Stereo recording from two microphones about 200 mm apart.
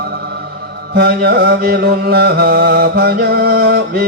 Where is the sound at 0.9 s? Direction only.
50° right (ahead or behind).